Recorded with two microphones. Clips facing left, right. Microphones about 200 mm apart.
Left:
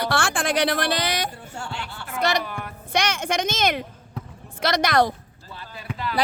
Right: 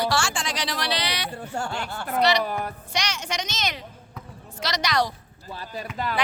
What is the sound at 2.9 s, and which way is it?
A woman's voice, 55° left (ahead or behind).